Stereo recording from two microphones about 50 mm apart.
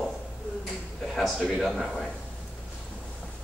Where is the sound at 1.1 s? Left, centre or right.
Centre.